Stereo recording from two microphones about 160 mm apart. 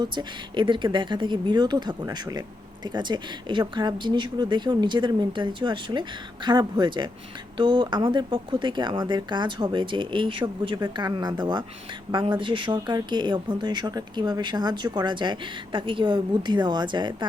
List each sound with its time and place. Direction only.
0.0 s speech: 30° right (ahead or behind)